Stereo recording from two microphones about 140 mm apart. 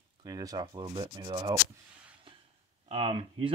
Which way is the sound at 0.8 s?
35° right (ahead or behind).